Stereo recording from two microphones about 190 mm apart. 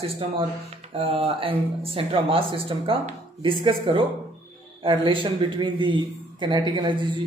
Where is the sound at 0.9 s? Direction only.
30° right (ahead or behind).